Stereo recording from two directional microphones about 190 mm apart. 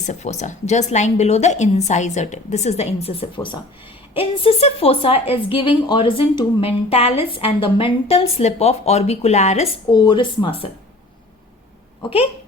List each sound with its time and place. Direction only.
0.0 s a woman's voice: 40° left (ahead or behind)